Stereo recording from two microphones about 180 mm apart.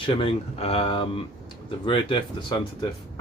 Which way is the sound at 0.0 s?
30° left (ahead or behind).